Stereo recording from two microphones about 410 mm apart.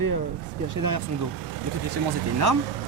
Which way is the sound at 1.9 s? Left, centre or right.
Right.